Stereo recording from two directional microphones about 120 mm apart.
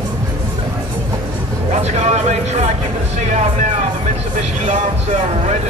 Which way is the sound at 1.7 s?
65° right (ahead or behind).